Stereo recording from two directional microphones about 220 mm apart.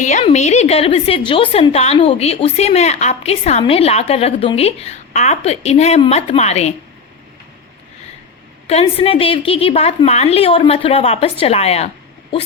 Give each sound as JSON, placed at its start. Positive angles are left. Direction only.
{"t": 0.0, "sound": "a woman's voice", "side_deg": 30}
{"t": 8.6, "sound": "a woman's voice", "side_deg": 25}